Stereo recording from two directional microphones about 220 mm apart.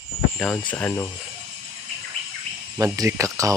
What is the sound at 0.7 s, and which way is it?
Speech, 10° left (ahead or behind).